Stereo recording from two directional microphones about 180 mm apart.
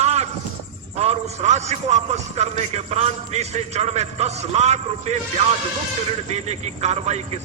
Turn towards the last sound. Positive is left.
turn(degrees=-35)  # may be behind; listen again after turning